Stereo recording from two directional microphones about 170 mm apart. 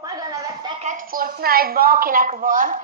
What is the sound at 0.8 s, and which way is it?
A woman's voice, 50° right (ahead or behind).